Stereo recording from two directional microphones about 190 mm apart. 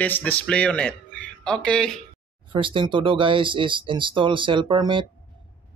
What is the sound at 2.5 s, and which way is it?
Speech, 25° right (ahead or behind).